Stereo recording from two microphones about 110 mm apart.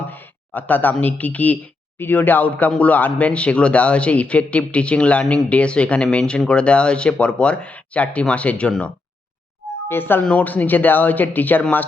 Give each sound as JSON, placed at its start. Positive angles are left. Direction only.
{"t": 0.1, "sound": "speech", "side_deg": 15}
{"t": 9.9, "sound": "speech", "side_deg": 20}